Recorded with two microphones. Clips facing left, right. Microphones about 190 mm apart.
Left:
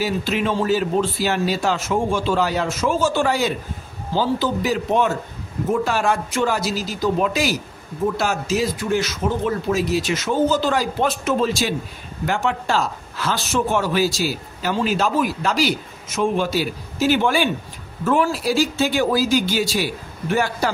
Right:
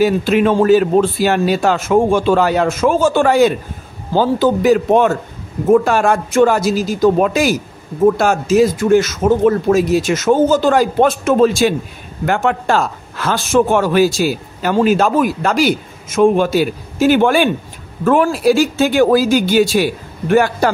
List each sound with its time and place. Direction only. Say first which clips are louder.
0.0 s speech: right 9 dB; 55° right (ahead or behind)